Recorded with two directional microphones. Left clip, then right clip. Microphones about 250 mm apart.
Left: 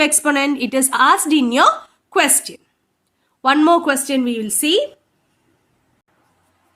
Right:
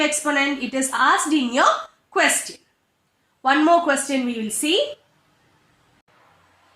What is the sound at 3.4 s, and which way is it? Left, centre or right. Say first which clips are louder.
Speech: left 3 dB; left.